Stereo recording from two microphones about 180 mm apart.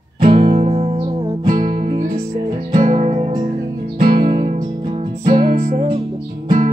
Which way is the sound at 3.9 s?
55° right (ahead or behind).